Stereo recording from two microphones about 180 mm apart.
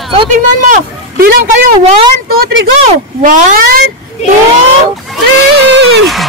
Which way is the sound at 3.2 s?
45° right (ahead or behind).